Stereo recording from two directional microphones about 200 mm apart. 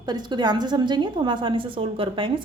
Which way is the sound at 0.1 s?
20° right (ahead or behind).